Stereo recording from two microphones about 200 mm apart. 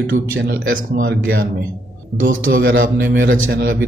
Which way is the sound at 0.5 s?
45° right (ahead or behind).